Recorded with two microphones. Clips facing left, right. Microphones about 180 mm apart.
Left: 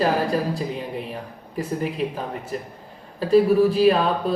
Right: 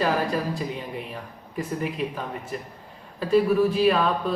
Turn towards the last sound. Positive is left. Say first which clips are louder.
# left 3 dB
turn(degrees=35)  # may be behind; listen again after turning